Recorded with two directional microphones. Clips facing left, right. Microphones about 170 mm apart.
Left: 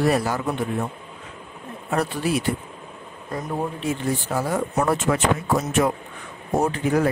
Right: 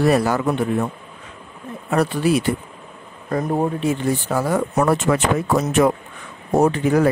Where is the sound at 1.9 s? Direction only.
75° right (ahead or behind).